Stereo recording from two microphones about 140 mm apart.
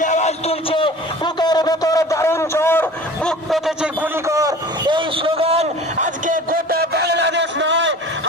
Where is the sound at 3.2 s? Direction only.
Centre (ahead or behind); by 6.1 s 50° right (ahead or behind).